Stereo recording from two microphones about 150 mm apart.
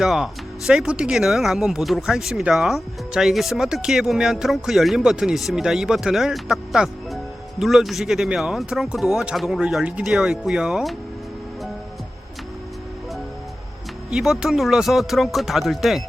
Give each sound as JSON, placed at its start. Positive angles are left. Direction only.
{"t": 0.0, "sound": "speech", "side_deg": 0}
{"t": 14.1, "sound": "speech", "side_deg": 0}